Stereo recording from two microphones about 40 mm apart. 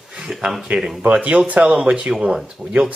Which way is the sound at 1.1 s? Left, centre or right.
Right.